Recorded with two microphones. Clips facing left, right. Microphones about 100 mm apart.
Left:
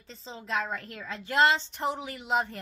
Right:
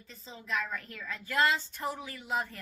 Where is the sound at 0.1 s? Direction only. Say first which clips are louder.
Left 3 dB; 30° left (ahead or behind).